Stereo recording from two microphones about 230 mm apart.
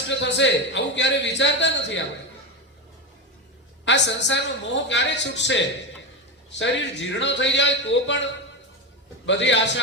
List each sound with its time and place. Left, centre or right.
0.1 s a man's voice: left
3.8 s a man's voice: left
6.6 s a man's voice: left